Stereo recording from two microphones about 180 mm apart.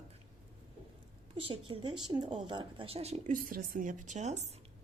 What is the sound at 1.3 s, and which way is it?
A woman's voice, 30° right (ahead or behind).